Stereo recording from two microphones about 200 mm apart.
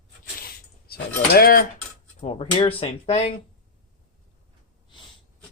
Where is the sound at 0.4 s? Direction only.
50° left (ahead or behind).